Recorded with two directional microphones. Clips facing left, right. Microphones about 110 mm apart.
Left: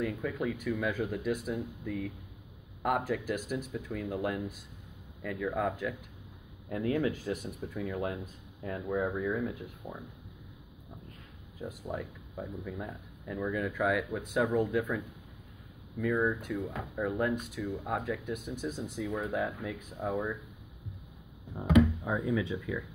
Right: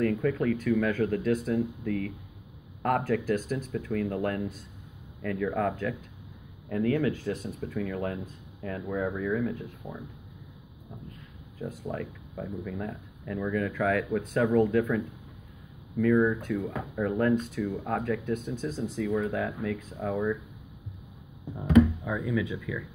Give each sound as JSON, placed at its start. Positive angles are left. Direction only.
{"t": 0.0, "sound": "speech", "side_deg": 10}
{"t": 11.9, "sound": "speech", "side_deg": 15}
{"t": 16.2, "sound": "speech", "side_deg": 5}
{"t": 19.3, "sound": "speech", "side_deg": 20}
{"t": 22.0, "sound": "speech", "side_deg": 25}